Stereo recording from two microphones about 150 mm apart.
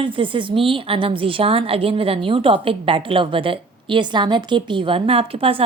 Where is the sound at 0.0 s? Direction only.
35° right (ahead or behind).